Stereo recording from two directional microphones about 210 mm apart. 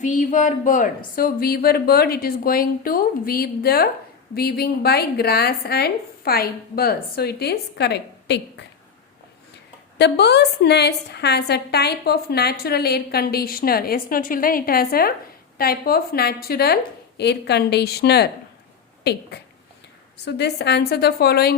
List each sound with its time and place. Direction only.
0.0 s a woman's voice: 35° left (ahead or behind); by 8.6 s 55° left (ahead or behind)
10.0 s a woman's voice: 55° left (ahead or behind)
19.3 s a sound: 55° left (ahead or behind)
20.2 s a woman's voice: 55° left (ahead or behind)